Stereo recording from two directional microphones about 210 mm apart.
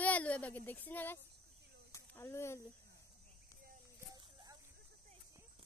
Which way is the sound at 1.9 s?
15° left (ahead or behind).